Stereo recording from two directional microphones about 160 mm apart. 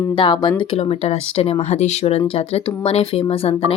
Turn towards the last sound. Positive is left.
turn(degrees=35)  # may be behind; listen again after turning